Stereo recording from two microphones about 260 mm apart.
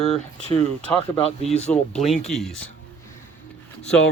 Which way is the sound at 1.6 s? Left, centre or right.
Centre.